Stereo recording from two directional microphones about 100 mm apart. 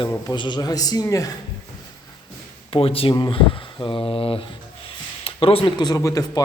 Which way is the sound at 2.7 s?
70° left (ahead or behind).